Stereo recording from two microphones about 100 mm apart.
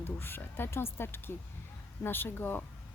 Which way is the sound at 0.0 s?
20° left (ahead or behind).